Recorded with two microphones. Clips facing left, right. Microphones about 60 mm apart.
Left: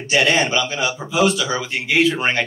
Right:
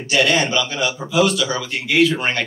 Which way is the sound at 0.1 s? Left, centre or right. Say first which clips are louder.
Even; left.